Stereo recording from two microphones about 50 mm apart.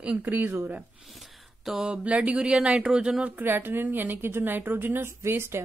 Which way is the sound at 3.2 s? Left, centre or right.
Right.